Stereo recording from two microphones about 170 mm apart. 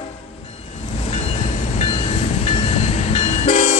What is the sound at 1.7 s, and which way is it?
Train, 40° left (ahead or behind).